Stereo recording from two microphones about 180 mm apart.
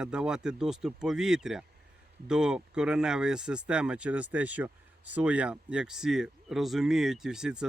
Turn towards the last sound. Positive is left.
turn(degrees=-5)  # may be behind; listen again after turning